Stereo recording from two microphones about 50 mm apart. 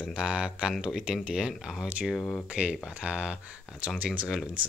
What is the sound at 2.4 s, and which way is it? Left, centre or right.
Speech, right.